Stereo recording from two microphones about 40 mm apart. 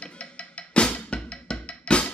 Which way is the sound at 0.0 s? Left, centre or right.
Left.